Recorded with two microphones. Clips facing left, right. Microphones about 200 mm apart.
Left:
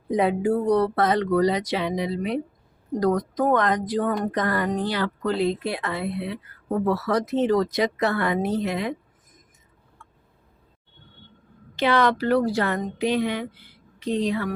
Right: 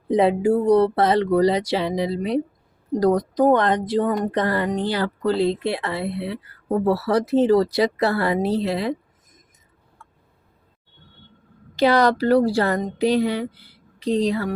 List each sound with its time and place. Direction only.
0.1 s speech: 30° right (ahead or behind)
11.8 s speech: 35° right (ahead or behind)